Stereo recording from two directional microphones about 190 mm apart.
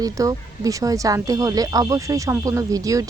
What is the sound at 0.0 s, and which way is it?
Speech, 20° right (ahead or behind).